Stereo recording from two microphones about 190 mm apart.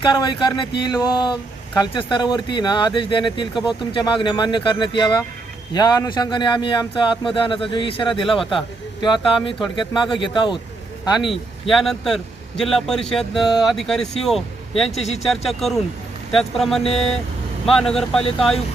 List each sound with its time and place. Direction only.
0.0 s speech: 25° left (ahead or behind)
8.2 s a man's voice: centre (ahead or behind)
8.5 s speech: 25° left (ahead or behind)
11.7 s a man's voice: centre (ahead or behind)
14.8 s speech: 35° left (ahead or behind)
15.3 s a man's voice: centre (ahead or behind)